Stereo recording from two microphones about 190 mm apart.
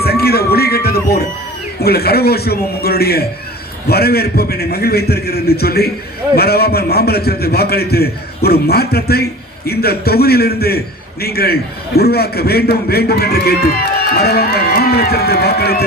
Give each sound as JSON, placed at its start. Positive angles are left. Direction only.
{"t": 0.0, "sound": "music", "side_deg": 55}
{"t": 1.8, "sound": "a man's voice", "side_deg": 55}